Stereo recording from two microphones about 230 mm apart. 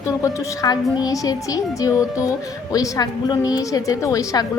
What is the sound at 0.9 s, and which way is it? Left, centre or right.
A woman's voice, centre.